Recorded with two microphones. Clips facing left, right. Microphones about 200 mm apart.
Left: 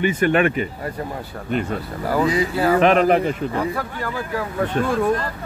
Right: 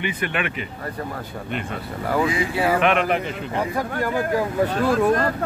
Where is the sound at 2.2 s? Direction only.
35° left (ahead or behind).